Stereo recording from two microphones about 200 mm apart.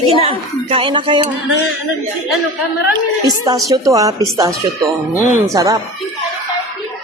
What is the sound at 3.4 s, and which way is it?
Speech, 20° right (ahead or behind).